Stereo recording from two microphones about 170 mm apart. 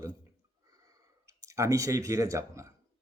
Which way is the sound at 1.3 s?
20° right (ahead or behind).